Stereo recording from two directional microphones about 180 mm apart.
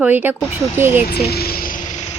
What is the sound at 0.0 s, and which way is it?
Speech, 10° right (ahead or behind).